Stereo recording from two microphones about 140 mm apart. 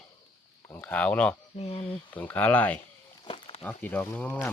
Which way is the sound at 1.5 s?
45° left (ahead or behind).